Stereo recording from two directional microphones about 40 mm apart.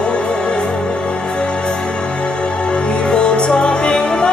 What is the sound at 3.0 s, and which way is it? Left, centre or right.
Music, left.